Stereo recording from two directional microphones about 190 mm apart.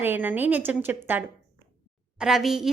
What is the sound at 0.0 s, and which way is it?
A woman's voice, 10° right (ahead or behind).